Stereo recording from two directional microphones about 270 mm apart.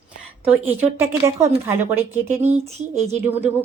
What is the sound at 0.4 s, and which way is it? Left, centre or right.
A woman's voice, centre.